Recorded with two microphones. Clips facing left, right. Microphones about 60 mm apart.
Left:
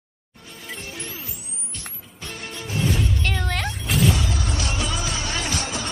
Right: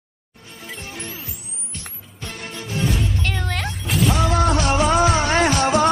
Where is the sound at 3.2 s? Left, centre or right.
Centre.